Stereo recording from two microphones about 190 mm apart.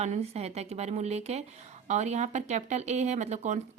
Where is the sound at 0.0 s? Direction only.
35° right (ahead or behind).